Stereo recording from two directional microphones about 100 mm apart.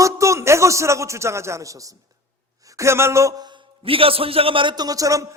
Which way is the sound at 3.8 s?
65° right (ahead or behind).